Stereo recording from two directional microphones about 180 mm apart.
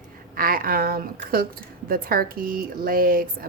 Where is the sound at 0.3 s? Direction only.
50° right (ahead or behind).